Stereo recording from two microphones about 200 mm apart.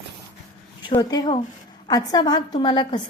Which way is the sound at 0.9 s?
20° left (ahead or behind).